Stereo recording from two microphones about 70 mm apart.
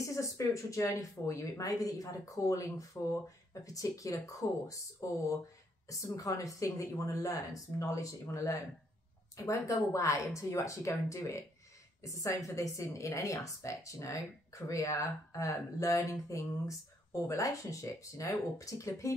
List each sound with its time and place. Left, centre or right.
0.0 s speech: left